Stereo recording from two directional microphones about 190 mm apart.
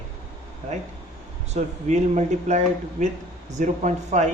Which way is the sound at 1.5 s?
35° right (ahead or behind).